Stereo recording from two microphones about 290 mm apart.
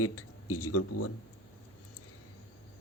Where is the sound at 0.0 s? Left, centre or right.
Left.